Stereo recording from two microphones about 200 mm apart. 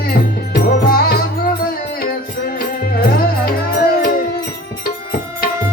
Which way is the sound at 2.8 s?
45° left (ahead or behind).